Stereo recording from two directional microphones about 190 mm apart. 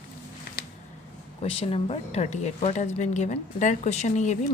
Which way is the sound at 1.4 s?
30° left (ahead or behind).